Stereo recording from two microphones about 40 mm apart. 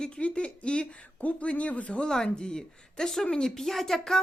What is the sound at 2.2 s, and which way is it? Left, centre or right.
Speech, left.